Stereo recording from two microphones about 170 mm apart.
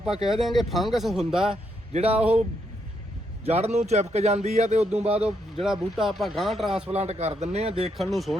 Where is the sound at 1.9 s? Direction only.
35° right (ahead or behind).